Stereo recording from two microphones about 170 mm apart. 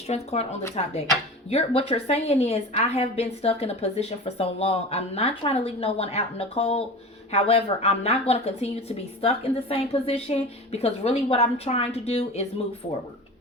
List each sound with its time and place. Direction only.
0.1 s a woman's voice: 40° left (ahead or behind)